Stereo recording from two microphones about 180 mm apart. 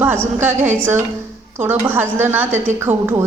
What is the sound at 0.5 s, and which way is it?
Speech, 40° right (ahead or behind).